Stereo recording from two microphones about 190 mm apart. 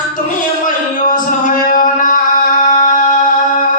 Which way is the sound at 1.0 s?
45° left (ahead or behind).